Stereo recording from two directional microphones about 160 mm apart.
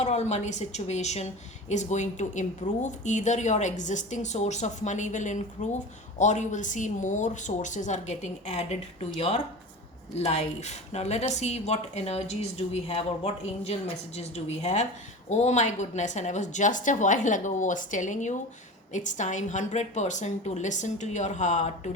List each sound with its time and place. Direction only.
0.0 s speech: 45° left (ahead or behind)